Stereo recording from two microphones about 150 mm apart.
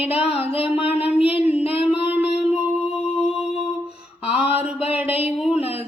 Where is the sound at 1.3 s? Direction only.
10° right (ahead or behind).